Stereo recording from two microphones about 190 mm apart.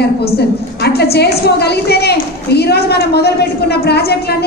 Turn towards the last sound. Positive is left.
turn(degrees=60)  # may be behind; listen again after turning